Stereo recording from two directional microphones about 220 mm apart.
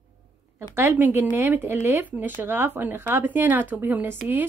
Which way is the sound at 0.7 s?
10° right (ahead or behind).